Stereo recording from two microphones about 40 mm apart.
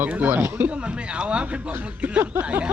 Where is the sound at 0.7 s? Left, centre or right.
Right.